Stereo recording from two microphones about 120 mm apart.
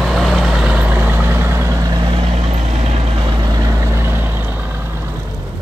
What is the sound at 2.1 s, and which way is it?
Vehicle, 60° right (ahead or behind).